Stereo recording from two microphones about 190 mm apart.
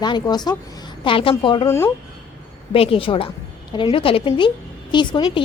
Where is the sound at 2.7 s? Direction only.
30° left (ahead or behind).